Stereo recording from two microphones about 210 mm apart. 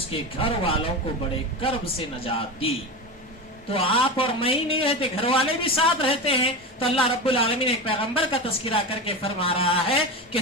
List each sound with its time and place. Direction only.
0.1 s a man's voice: 25° left (ahead or behind)
3.7 s a man's voice: 25° left (ahead or behind)